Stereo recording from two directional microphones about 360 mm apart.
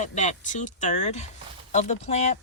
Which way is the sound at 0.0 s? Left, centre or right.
Centre.